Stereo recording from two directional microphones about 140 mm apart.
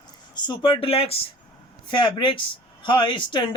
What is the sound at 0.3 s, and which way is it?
Speech, 35° left (ahead or behind).